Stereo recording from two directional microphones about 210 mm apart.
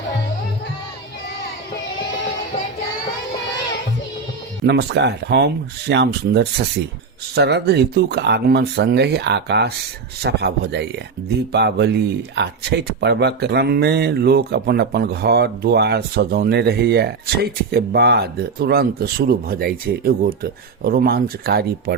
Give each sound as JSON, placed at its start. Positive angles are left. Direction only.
{"t": 4.6, "sound": "speech", "side_deg": -55}